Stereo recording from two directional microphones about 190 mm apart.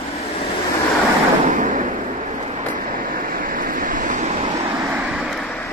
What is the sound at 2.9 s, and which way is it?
Waves, 45° right (ahead or behind).